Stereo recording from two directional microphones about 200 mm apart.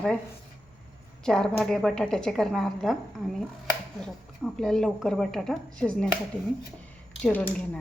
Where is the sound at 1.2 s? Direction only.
5° left (ahead or behind).